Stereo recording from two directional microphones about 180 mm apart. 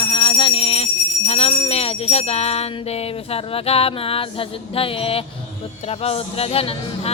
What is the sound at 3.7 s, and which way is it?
Speech, 35° left (ahead or behind).